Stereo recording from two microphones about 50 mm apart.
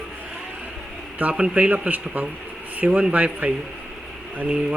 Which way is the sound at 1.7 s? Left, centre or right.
Right.